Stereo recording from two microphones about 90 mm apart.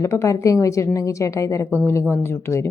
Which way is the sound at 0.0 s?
30° left (ahead or behind).